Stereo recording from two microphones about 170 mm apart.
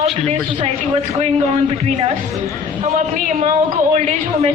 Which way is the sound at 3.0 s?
45° right (ahead or behind).